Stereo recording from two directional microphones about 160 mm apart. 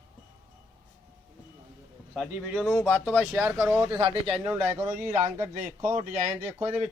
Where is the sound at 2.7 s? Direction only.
10° left (ahead or behind); by 6.0 s 15° right (ahead or behind).